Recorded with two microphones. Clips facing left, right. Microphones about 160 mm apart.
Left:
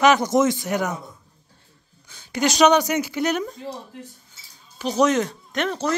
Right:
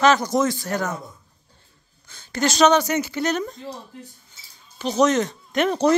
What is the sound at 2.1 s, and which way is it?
A woman's voice, 15° left (ahead or behind).